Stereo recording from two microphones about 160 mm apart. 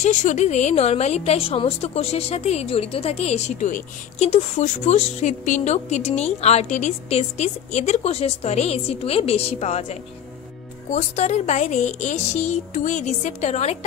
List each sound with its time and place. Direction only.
0.0 s a woman's voice: 50° left (ahead or behind)